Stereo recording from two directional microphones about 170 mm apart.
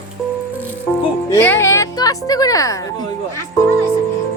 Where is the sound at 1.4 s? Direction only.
15° left (ahead or behind).